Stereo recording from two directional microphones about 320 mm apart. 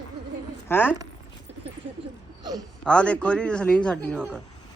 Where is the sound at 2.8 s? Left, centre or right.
Centre.